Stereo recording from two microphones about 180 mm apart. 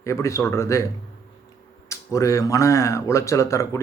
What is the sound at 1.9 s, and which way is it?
Speech, 15° left (ahead or behind).